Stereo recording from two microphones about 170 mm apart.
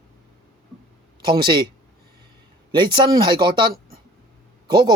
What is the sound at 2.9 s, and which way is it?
Speech, 30° right (ahead or behind).